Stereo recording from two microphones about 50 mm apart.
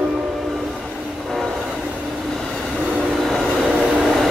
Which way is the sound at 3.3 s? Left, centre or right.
Centre.